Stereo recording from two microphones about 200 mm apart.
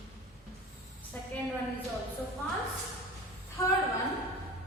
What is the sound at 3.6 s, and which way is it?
Speech, 15° left (ahead or behind).